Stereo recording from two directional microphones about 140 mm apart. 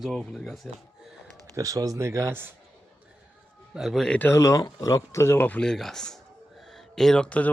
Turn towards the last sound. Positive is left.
turn(degrees=5)  # may be behind; listen again after turning